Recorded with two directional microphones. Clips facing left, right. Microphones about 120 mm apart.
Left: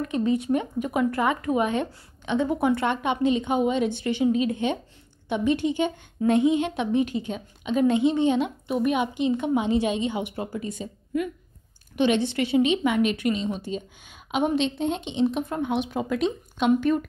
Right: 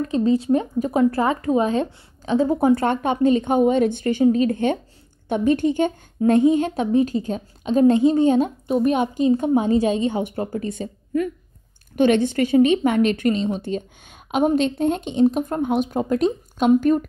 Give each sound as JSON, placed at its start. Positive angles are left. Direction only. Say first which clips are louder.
{"t": 0.0, "sound": "speech", "louder": "right 5 dB", "side_deg": -30}